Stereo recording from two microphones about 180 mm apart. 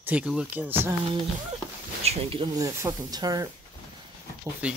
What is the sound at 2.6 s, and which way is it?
Speech, 20° right (ahead or behind).